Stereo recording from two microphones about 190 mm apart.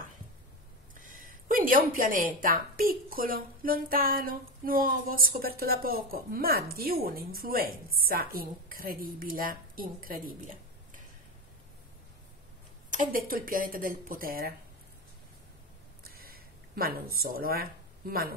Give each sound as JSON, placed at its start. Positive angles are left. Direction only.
{"t": 0.9, "sound": "a woman's voice", "side_deg": -45}
{"t": 12.9, "sound": "a woman's voice", "side_deg": -45}
{"t": 16.0, "sound": "a sound", "side_deg": -50}